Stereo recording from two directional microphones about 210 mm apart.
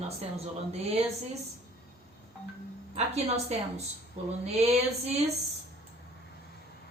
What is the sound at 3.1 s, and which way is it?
A woman's voice, 30° right (ahead or behind).